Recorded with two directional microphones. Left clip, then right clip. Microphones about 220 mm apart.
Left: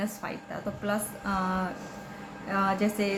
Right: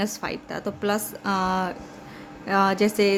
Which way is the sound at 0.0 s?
55° right (ahead or behind).